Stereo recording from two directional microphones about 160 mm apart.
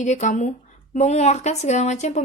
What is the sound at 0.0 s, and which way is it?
A woman's voice, 50° left (ahead or behind).